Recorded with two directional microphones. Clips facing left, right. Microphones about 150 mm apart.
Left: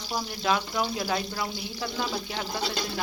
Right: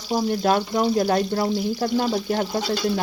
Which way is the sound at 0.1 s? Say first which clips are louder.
Right 8 dB; 45° right (ahead or behind).